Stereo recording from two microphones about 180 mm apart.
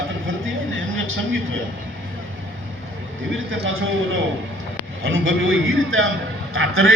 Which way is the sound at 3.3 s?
90° right.